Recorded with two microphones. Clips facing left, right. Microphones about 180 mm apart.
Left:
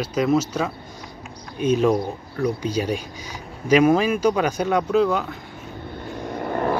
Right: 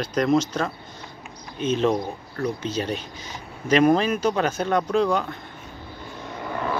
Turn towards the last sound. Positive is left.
turn(degrees=50)  # may be behind; listen again after turning